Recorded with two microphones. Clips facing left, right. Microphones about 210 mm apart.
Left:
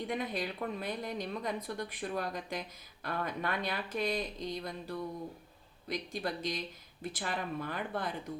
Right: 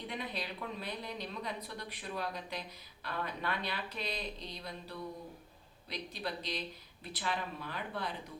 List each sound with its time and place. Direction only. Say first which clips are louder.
0.1 s a woman's voice: left 5 dB; 50° left (ahead or behind)